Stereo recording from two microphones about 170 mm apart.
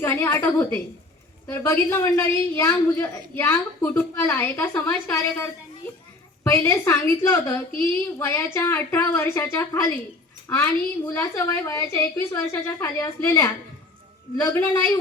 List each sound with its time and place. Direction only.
0.0 s a woman's voice: 15° left (ahead or behind)